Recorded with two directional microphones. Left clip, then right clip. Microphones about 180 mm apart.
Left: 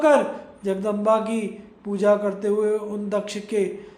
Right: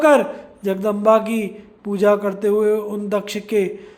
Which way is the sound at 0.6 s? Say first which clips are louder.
Right 5 dB; 40° right (ahead or behind).